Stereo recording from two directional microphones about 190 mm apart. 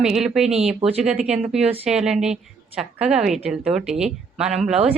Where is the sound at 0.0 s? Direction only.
5° right (ahead or behind).